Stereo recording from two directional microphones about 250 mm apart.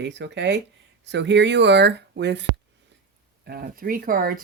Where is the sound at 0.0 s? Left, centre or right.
Right.